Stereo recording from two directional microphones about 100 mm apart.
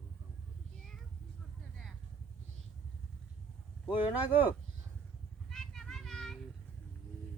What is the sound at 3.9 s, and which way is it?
Speech, 15° right (ahead or behind).